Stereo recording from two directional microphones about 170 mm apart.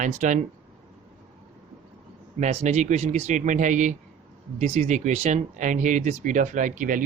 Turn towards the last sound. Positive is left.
turn(degrees=-50)  # may be behind; listen again after turning